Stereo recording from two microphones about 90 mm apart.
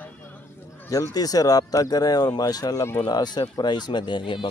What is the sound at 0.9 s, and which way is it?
Speech, 40° left (ahead or behind).